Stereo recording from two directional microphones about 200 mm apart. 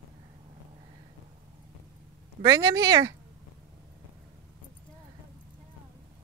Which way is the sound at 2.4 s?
15° right (ahead or behind).